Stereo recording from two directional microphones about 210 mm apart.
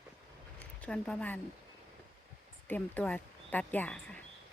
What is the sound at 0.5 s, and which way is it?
Speech, 5° left (ahead or behind).